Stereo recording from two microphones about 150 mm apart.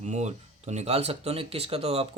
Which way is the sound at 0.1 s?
50° right (ahead or behind).